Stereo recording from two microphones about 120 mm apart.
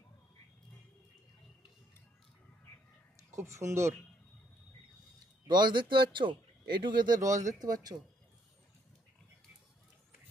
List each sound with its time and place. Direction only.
3.3 s speech: 20° right (ahead or behind)
5.5 s speech: 40° right (ahead or behind)